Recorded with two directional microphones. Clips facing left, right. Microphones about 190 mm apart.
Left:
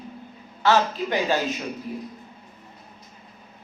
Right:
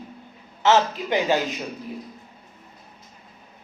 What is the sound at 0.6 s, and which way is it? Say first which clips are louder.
Speech: right 1 dB; 20° right (ahead or behind).